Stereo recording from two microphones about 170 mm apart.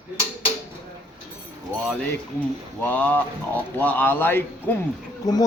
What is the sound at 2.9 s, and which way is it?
A man's voice, 10° left (ahead or behind).